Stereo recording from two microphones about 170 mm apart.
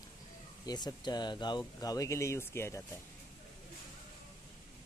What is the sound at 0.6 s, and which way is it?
Speech, 25° left (ahead or behind).